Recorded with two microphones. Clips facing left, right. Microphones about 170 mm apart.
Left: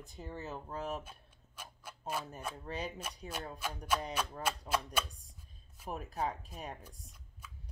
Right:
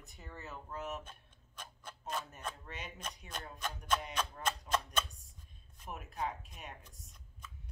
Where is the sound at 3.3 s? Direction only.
10° left (ahead or behind).